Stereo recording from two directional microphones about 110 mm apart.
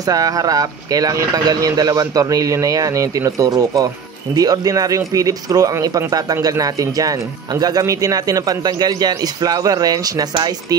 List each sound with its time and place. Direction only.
0.0 s speech: 35° right (ahead or behind)